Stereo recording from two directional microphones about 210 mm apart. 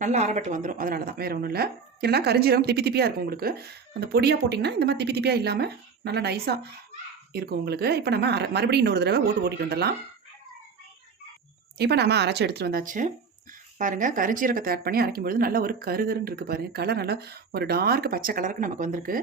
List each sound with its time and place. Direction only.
0.0 s speech: 35° right (ahead or behind); by 9.9 s 50° right (ahead or behind)
11.8 s speech: 50° right (ahead or behind)